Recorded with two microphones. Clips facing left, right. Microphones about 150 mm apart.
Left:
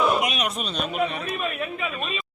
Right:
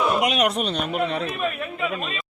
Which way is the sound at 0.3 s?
70° right (ahead or behind).